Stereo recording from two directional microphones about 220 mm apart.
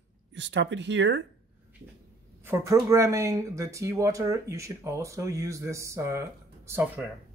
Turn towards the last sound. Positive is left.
turn(degrees=-5)  # may be behind; listen again after turning